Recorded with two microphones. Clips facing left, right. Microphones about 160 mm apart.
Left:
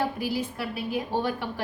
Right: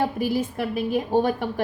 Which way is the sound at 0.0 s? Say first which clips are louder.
Right 5 dB; 50° right (ahead or behind).